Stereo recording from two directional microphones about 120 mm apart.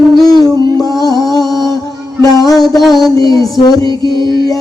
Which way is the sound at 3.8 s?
40° right (ahead or behind).